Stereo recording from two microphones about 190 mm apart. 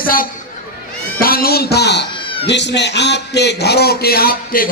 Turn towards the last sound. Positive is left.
turn(degrees=50)  # may be behind; listen again after turning